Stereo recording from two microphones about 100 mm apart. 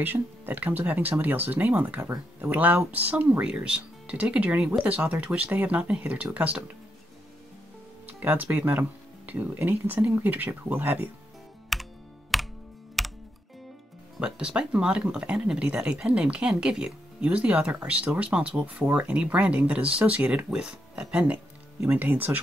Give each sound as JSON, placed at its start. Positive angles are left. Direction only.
{"t": 0.0, "sound": "speech", "side_deg": -20}
{"t": 8.1, "sound": "speech", "side_deg": -15}
{"t": 11.7, "sound": "computer keyboard", "side_deg": 0}
{"t": 13.0, "sound": "music", "side_deg": 0}
{"t": 14.2, "sound": "speech", "side_deg": -10}